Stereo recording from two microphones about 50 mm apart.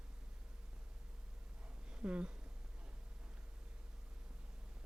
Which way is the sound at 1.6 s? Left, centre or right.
Right.